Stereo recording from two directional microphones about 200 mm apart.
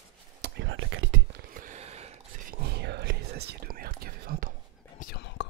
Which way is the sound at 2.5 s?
55° right (ahead or behind).